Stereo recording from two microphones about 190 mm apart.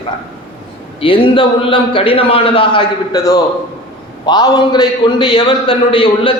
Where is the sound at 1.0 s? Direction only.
25° left (ahead or behind).